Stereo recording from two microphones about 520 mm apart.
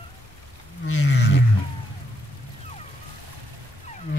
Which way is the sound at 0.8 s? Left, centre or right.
Left.